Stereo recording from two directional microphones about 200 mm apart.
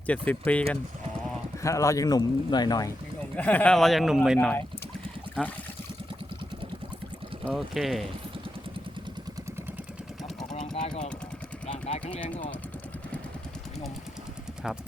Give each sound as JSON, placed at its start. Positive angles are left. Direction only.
{"t": 0.1, "sound": "speech", "side_deg": 5}
{"t": 1.6, "sound": "speech", "side_deg": 15}
{"t": 3.3, "sound": "a man's voice", "side_deg": 5}
{"t": 7.4, "sound": "a man's voice", "side_deg": 0}
{"t": 10.8, "sound": "jackhammer", "side_deg": 35}
{"t": 11.7, "sound": "a sound", "side_deg": 35}